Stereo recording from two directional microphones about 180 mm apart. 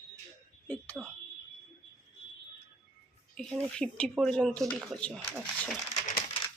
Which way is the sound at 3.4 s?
5° left (ahead or behind).